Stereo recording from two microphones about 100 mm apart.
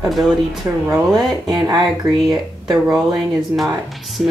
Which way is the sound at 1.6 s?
40° right (ahead or behind).